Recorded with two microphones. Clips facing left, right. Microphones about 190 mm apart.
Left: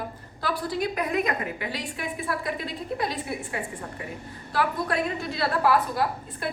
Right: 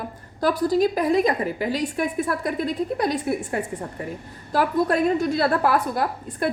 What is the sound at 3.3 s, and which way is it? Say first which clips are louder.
Speech: right 8 dB; 55° right (ahead or behind).